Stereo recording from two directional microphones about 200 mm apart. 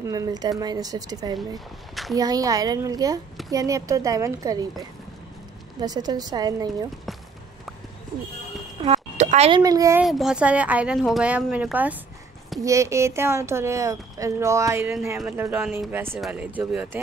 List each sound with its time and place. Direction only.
0.0 s speech: 15° right (ahead or behind)
5.8 s speech: 20° right (ahead or behind)
8.8 s a sound: 35° right (ahead or behind)
9.6 s speech: 15° right (ahead or behind)
10.0 s speech: centre (ahead or behind)